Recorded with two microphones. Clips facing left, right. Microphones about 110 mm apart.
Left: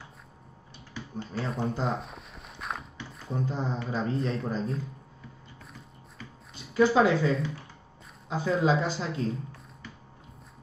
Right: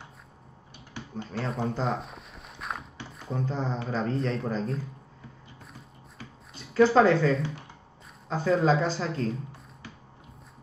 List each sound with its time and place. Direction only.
1.4 s walk: centre (ahead or behind)
3.2 s speech: 5° left (ahead or behind)
3.6 s speech: 30° right (ahead or behind)
3.9 s speech: 5° left (ahead or behind)
6.5 s speech: centre (ahead or behind)